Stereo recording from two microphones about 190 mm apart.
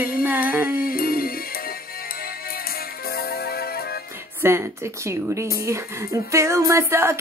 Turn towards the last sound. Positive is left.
turn(degrees=-15)  # may be behind; listen again after turning